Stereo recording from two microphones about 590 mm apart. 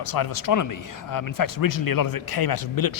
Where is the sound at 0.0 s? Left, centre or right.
Left.